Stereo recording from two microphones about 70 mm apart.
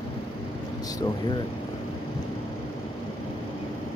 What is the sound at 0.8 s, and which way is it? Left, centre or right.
Air conditioning, left.